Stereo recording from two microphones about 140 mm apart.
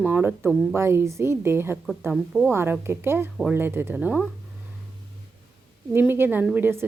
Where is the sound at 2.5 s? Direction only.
15° right (ahead or behind).